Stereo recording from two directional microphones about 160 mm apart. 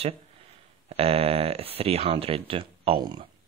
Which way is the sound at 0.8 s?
40° right (ahead or behind).